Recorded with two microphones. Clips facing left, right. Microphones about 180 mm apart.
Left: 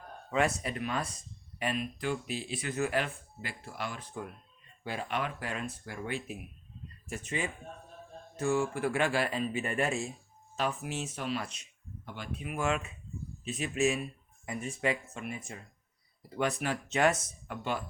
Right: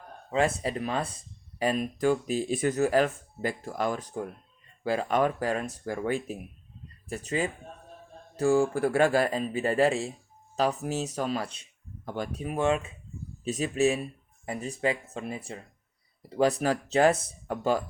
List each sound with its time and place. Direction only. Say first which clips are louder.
0.3 s speech: right 4 dB; 30° right (ahead or behind)